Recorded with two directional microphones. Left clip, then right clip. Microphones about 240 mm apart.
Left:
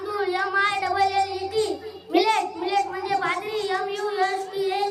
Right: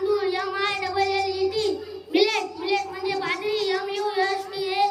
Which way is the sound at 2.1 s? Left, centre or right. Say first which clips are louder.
Left 1 dB; centre.